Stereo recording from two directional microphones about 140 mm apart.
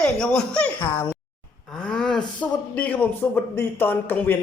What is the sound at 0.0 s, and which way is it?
A man's voice, 5° left (ahead or behind).